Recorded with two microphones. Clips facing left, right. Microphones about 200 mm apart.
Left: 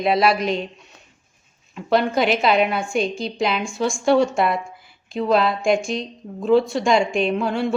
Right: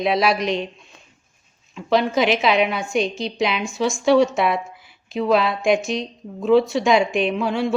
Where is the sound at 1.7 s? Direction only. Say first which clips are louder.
Even; centre (ahead or behind).